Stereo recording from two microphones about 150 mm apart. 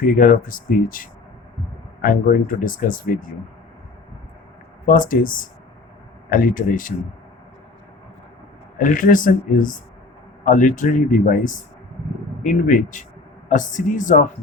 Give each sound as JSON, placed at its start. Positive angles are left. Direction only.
{"t": 0.0, "sound": "speech", "side_deg": 65}
{"t": 4.9, "sound": "speech", "side_deg": 65}
{"t": 8.8, "sound": "speech", "side_deg": 65}